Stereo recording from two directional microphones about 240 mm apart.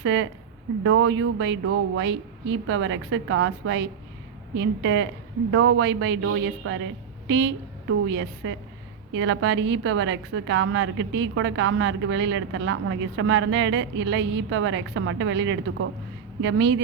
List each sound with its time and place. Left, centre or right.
0.0 s a woman's voice: right